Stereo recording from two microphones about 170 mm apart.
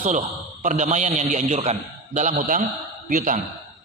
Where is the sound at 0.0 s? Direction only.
45° right (ahead or behind).